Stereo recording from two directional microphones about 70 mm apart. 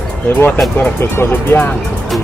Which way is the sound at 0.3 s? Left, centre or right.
Left.